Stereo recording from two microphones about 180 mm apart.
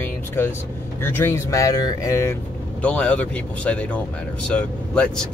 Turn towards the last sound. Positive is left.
turn(degrees=5)  # may be behind; listen again after turning